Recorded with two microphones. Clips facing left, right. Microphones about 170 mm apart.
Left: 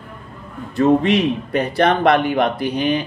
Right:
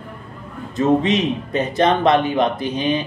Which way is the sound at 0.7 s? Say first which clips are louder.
Left 2 dB; 20° right (ahead or behind).